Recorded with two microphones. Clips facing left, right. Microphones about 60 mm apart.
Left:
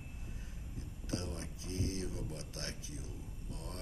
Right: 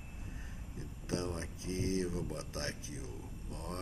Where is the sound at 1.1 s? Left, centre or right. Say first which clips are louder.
Right 4 dB; right.